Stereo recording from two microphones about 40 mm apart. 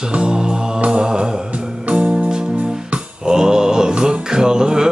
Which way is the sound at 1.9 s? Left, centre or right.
Right.